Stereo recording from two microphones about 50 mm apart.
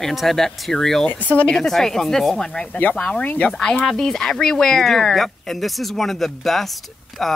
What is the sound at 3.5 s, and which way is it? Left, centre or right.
Speech, centre.